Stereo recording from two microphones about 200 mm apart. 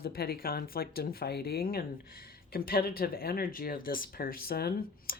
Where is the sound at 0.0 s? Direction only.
50° left (ahead or behind).